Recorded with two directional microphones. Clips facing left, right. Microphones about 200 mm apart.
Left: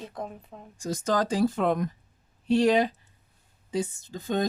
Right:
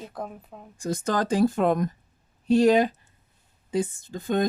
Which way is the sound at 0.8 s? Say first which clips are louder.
Right 1 dB; 55° right (ahead or behind).